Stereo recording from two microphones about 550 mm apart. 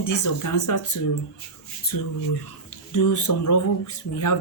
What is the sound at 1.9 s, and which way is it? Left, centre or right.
Speech, left.